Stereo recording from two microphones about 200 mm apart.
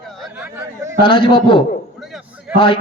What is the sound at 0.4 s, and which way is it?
Speech, 10° right (ahead or behind).